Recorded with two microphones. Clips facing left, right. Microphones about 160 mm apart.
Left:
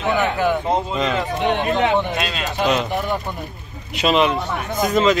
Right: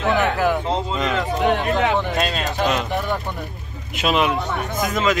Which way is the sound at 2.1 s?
40° right (ahead or behind).